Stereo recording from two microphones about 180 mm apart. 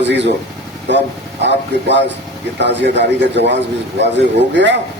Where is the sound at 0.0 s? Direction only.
75° right (ahead or behind).